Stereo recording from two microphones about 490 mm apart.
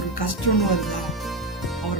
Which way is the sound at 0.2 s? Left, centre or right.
Left.